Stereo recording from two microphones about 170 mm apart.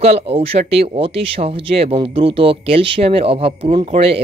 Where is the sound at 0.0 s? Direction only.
35° right (ahead or behind).